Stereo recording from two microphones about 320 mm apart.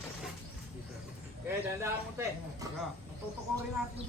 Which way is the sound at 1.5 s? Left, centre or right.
Centre.